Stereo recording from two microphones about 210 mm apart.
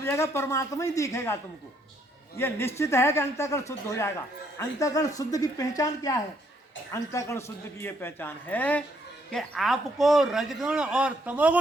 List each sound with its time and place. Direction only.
0.0 s speech: 10° left (ahead or behind)
2.4 s speech: 10° left (ahead or behind); by 11.6 s 5° right (ahead or behind)